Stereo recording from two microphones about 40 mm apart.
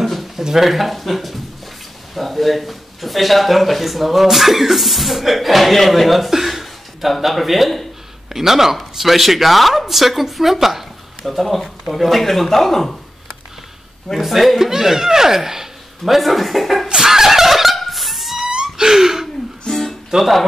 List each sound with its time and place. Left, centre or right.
0.0 s a sound: centre
0.4 s speech: centre
14.2 s speech: centre
16.2 s speech: centre
16.8 s snicker: centre
17.7 s a sound: centre
18.4 s wail: centre
18.9 s a sound: centre
19.7 s music: centre
20.2 s speech: centre